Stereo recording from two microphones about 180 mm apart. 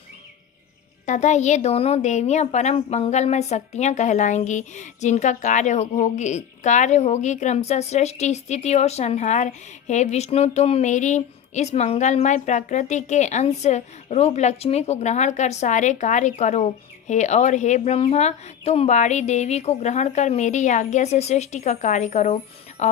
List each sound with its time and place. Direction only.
1.0 s a woman's voice: 40° left (ahead or behind)